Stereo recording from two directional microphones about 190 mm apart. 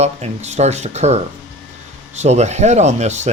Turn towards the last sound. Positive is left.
turn(degrees=-35)  # may be behind; listen again after turning